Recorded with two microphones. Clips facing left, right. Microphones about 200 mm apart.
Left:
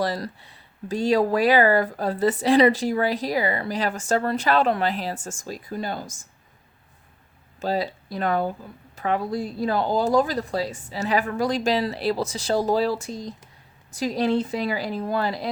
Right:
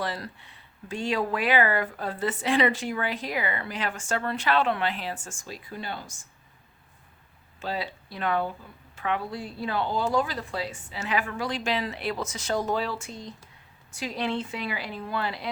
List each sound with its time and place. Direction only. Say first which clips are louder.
0.0 s speech: left 6 dB; 40° left (ahead or behind)
7.6 s speech: left 7 dB; 40° left (ahead or behind)